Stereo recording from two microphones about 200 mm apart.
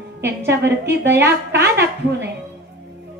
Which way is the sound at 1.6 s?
55° right (ahead or behind).